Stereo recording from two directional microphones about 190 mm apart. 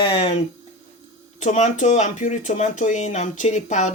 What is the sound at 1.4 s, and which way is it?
Speech, 40° left (ahead or behind).